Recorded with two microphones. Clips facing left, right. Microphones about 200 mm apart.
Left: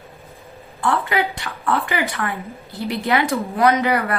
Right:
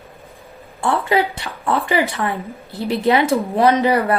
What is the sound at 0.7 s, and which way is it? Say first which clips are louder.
Speech: right 3 dB; 25° right (ahead or behind).